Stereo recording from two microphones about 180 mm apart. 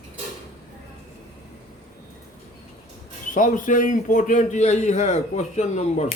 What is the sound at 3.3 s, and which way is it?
A man's voice, 45° left (ahead or behind).